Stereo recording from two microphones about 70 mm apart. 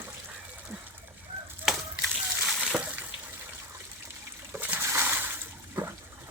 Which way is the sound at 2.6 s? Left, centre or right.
Centre.